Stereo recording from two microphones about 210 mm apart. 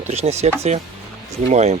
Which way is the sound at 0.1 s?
30° right (ahead or behind).